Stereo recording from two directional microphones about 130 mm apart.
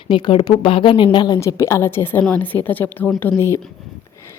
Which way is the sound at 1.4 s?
20° left (ahead or behind).